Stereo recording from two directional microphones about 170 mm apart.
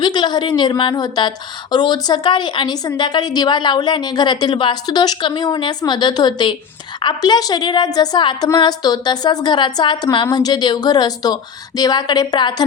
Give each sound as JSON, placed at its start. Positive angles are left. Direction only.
{"t": 0.0, "sound": "a woman's voice", "side_deg": 25}